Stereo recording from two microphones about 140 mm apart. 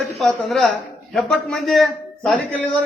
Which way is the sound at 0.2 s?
Centre (ahead or behind).